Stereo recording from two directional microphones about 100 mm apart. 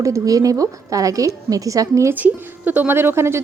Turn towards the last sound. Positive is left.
turn(degrees=-25)  # may be behind; listen again after turning